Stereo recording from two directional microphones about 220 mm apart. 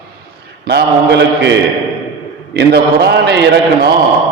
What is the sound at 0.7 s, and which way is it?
Speech, 50° right (ahead or behind).